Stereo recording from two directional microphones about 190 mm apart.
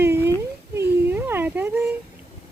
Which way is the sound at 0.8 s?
10° right (ahead or behind).